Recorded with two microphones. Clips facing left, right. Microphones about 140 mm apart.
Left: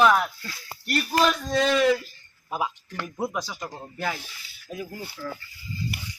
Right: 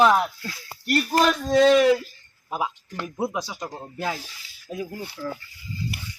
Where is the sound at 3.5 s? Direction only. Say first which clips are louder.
Right 2 dB; 15° right (ahead or behind).